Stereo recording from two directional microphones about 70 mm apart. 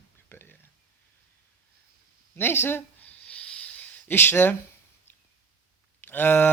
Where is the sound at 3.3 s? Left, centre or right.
Centre.